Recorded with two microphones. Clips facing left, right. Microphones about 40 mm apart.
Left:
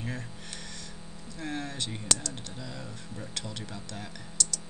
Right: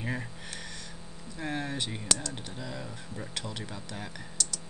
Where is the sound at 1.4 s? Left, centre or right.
Centre.